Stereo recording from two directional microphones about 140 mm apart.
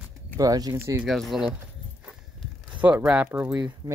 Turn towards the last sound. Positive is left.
turn(degrees=-30)  # may be behind; listen again after turning